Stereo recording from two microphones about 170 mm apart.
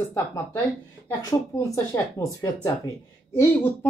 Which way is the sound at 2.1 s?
20° left (ahead or behind).